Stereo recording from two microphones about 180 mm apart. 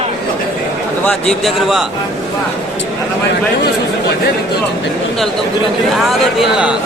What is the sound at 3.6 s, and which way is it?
Speech, 60° left (ahead or behind).